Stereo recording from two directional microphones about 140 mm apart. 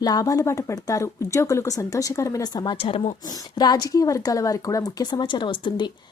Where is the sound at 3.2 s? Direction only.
30° left (ahead or behind).